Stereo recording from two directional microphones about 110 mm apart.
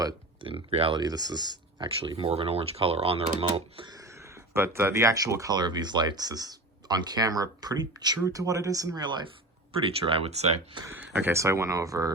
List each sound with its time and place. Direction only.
0.4 s speech: 60° right (ahead or behind)
0.9 s speech: 40° right (ahead or behind)
2.0 s speech: 55° right (ahead or behind)
3.8 s speech: 30° right (ahead or behind)
10.0 s speech: 60° right (ahead or behind); by 10.6 s 75° right (ahead or behind)
11.0 s speech: 15° right (ahead or behind); by 12.1 s 30° right (ahead or behind)